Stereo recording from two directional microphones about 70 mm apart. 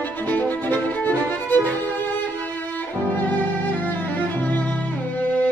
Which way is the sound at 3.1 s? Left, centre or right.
Left.